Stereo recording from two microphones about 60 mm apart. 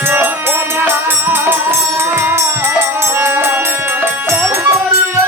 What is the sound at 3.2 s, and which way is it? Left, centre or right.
Music, right.